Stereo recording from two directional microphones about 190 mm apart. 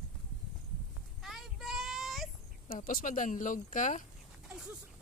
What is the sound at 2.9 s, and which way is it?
Speech, 45° left (ahead or behind).